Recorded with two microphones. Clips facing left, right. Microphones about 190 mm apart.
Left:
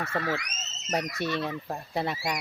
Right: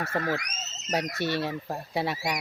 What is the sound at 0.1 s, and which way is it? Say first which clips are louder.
Speech: right 2 dB; 45° right (ahead or behind).